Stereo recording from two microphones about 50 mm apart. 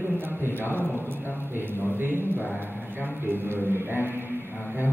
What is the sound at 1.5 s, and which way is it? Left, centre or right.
Speech, right.